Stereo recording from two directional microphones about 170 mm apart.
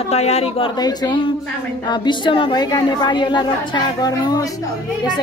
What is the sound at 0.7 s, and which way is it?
A woman's voice, 25° left (ahead or behind).